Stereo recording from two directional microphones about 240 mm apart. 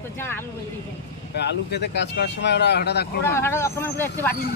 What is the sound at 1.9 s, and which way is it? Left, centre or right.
Speech, left.